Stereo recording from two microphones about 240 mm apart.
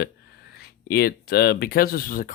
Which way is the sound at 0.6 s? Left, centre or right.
Left.